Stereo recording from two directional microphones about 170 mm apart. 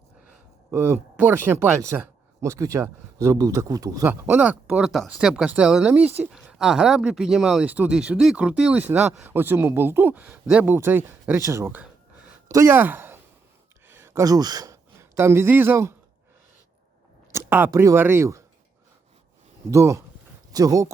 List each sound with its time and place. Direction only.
0.7 s speech: 15° right (ahead or behind)
13.8 s a sound: 15° right (ahead or behind)
17.3 s speech: 15° right (ahead or behind)
19.7 s speech: 15° right (ahead or behind)